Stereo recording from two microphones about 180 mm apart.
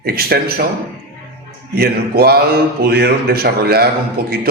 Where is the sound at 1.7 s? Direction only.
60° right (ahead or behind).